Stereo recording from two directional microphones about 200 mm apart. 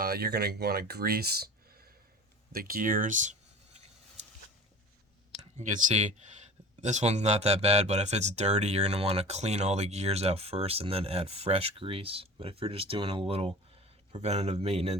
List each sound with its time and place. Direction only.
0.0 s speech: 50° right (ahead or behind)
5.5 s speech: 35° right (ahead or behind)